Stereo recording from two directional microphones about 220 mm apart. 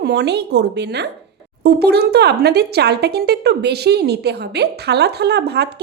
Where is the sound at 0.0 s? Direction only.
50° right (ahead or behind).